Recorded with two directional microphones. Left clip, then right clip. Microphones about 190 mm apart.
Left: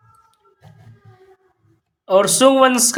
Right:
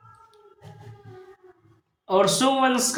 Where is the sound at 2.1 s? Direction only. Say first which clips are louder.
Left 7 dB; 30° left (ahead or behind).